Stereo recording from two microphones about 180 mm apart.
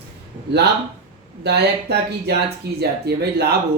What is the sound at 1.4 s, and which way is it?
Speech, 65° right (ahead or behind).